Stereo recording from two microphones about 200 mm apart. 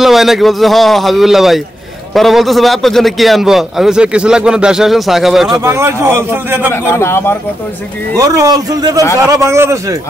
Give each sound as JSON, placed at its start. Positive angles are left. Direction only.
{"t": 0.0, "sound": "a man's voice", "side_deg": 0}
{"t": 5.6, "sound": "a man's voice", "side_deg": -10}
{"t": 6.7, "sound": "a man's voice", "side_deg": 15}
{"t": 8.2, "sound": "a man's voice", "side_deg": -15}